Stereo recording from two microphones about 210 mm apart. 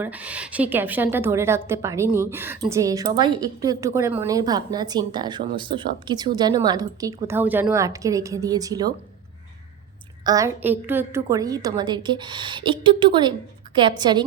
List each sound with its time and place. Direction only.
0.0 s a woman's voice: 5° right (ahead or behind)
10.2 s a woman's voice: 15° right (ahead or behind)